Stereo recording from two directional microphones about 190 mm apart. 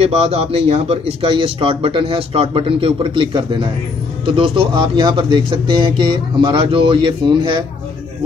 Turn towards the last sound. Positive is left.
turn(degrees=-25)  # may be behind; listen again after turning